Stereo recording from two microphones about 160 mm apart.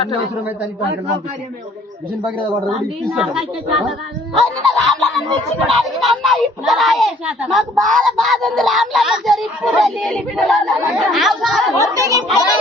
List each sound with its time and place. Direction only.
3.1 s speech: 5° right (ahead or behind)
11.9 s speech: 20° right (ahead or behind)